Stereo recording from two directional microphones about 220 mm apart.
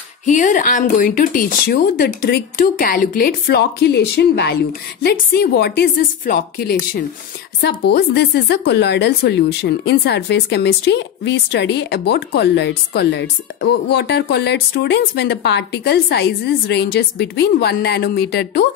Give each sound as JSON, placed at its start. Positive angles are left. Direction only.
{"t": 0.2, "sound": "speech", "side_deg": 35}